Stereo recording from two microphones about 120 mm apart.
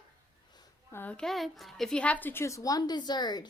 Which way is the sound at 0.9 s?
20° left (ahead or behind).